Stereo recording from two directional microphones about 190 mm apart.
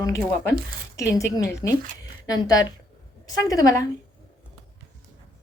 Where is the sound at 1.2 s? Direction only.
15° left (ahead or behind).